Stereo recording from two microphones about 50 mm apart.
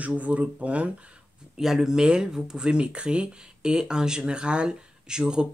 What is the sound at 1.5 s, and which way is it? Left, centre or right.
Speech, centre.